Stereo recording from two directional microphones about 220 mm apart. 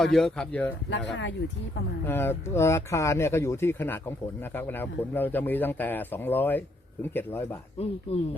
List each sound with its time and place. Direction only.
0.0 s speech: centre (ahead or behind)
0.9 s speech: 55° left (ahead or behind)
2.0 s a man's voice: 10° left (ahead or behind)
8.1 s speech: 25° left (ahead or behind)